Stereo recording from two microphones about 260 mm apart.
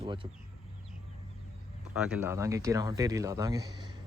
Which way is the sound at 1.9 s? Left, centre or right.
Centre.